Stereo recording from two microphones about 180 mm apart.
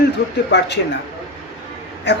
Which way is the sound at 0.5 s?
75° left (ahead or behind).